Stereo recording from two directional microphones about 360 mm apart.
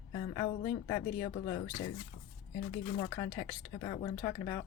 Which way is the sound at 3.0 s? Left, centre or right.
Centre.